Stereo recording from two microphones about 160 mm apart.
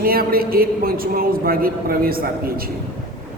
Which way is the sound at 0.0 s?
70° right (ahead or behind).